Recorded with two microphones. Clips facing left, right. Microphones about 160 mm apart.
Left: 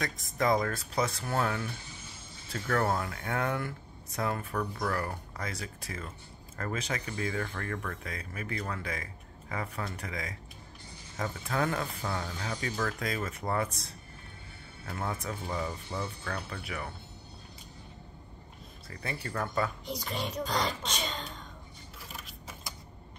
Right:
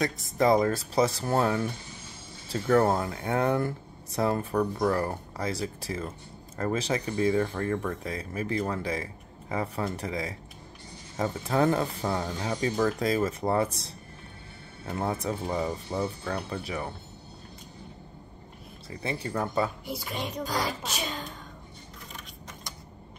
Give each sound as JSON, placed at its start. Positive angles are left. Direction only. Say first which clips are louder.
{"t": 0.0, "sound": "speech", "louder": "right 6 dB", "side_deg": -30}
{"t": 14.9, "sound": "speech", "louder": "right 6 dB", "side_deg": -30}
{"t": 18.9, "sound": "speech", "louder": "right 6 dB", "side_deg": -20}
{"t": 19.9, "sound": "speech", "louder": "right 1 dB", "side_deg": -5}
{"t": 22.1, "sound": "keys jangling", "louder": "left 1 dB", "side_deg": 5}